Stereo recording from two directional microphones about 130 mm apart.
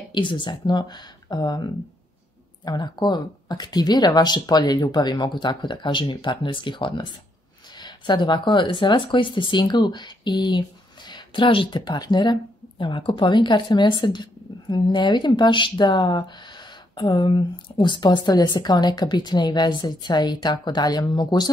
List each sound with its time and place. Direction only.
0.1 s speech: 40° left (ahead or behind)